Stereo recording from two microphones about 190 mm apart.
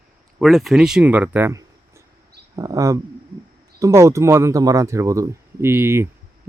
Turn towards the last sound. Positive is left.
turn(degrees=-15)  # may be behind; listen again after turning